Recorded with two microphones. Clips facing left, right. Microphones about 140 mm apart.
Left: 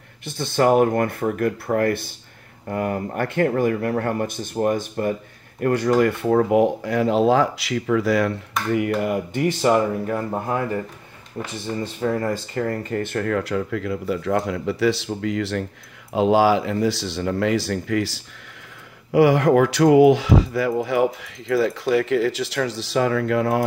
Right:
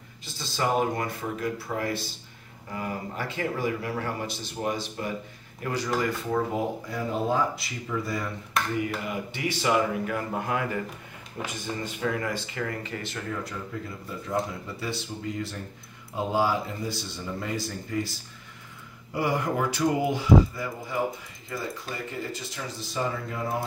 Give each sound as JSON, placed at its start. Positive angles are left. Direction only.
{"t": 0.2, "sound": "speech", "side_deg": 60}
{"t": 8.7, "sound": "speech", "side_deg": 60}
{"t": 11.4, "sound": "speech", "side_deg": -5}
{"t": 11.8, "sound": "speech", "side_deg": 35}